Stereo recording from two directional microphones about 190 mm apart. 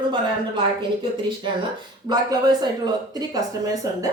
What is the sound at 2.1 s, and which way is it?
A woman's voice, 20° right (ahead or behind).